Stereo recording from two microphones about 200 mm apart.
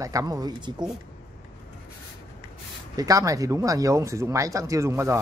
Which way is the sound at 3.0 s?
15° right (ahead or behind).